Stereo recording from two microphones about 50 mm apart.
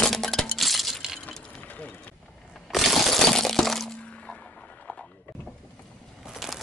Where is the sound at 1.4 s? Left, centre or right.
Left.